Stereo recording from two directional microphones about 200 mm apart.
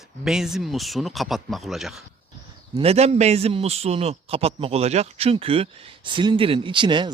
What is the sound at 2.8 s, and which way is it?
Speech, 30° right (ahead or behind).